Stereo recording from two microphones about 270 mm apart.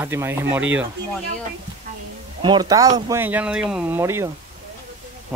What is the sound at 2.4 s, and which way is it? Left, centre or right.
Speech, centre.